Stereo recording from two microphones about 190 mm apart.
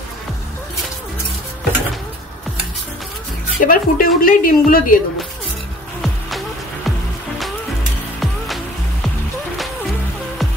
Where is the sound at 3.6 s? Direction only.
50° left (ahead or behind).